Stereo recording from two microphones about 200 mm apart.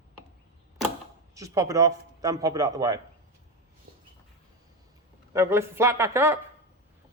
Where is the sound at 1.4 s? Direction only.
15° right (ahead or behind).